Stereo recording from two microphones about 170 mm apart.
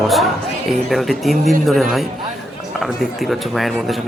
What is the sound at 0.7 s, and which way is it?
Speech, centre (ahead or behind).